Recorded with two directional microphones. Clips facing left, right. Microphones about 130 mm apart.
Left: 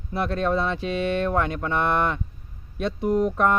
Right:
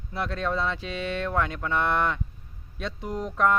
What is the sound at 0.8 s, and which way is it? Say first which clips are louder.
Speech: left 6 dB; 55° left (ahead or behind).